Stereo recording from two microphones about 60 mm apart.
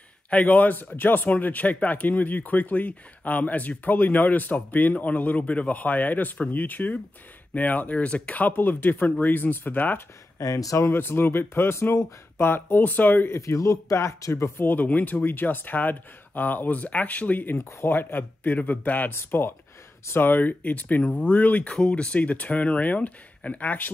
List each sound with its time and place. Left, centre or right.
0.3 s speech: left
10.4 s speech: left
10.9 s speech: left
13.3 s speech: left
14.6 s speech: left
17.6 s speech: left
17.8 s speech: left